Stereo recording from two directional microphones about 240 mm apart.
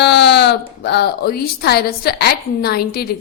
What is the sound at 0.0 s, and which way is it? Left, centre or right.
Speech, left.